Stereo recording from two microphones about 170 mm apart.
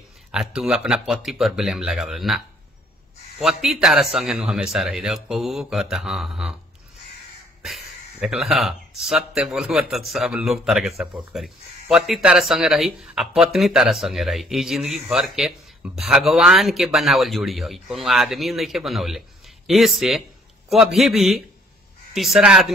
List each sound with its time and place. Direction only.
0.3 s speech: 5° right (ahead or behind)
7.6 s speech: centre (ahead or behind)